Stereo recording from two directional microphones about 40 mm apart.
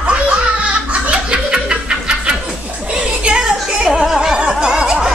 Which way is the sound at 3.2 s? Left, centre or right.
Right.